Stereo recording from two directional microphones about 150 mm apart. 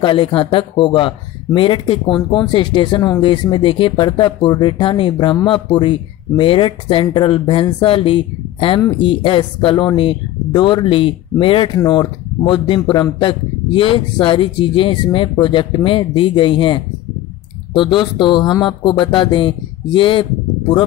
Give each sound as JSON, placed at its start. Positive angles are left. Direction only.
{"t": 0.0, "sound": "speech", "side_deg": 35}